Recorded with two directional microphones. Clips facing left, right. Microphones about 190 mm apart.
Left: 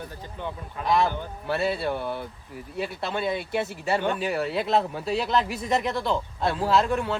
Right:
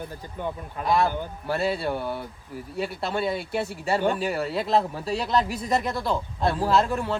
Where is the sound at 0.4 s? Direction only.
10° right (ahead or behind).